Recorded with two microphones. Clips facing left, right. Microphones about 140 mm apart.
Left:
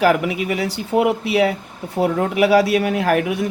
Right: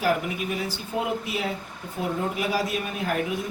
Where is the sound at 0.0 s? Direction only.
85° left.